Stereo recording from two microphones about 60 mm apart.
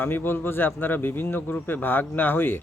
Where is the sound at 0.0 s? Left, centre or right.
Left.